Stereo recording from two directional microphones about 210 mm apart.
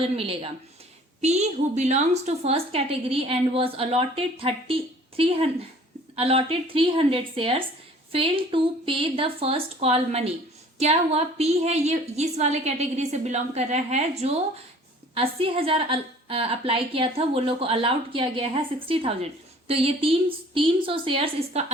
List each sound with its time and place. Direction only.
0.0 s a woman's voice: 25° right (ahead or behind)